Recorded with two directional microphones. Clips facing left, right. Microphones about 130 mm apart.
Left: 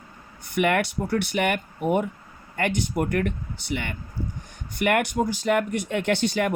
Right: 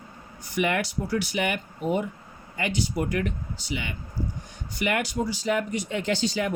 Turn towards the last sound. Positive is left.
turn(degrees=60)  # may be behind; listen again after turning